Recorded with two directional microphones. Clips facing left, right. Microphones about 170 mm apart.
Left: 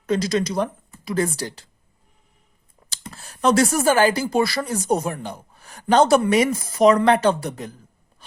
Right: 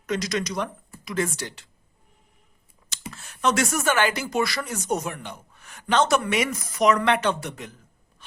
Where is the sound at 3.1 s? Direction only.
35° left (ahead or behind).